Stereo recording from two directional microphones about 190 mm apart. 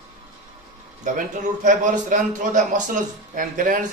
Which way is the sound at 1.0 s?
40° right (ahead or behind).